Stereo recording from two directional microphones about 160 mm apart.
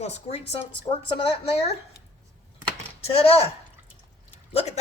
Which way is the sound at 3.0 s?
40° left (ahead or behind).